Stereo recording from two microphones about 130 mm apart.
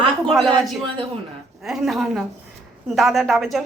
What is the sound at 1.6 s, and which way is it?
Speech, centre (ahead or behind).